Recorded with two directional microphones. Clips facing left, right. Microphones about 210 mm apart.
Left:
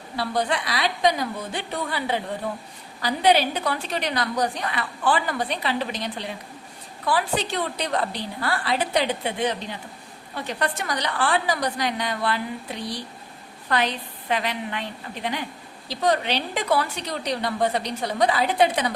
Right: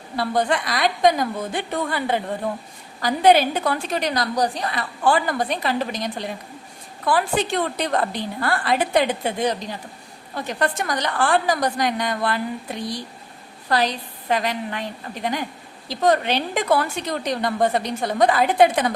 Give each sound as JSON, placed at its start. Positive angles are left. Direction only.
{"t": 0.2, "sound": "a woman's voice", "side_deg": -50}
{"t": 13.7, "sound": "a woman's voice", "side_deg": -35}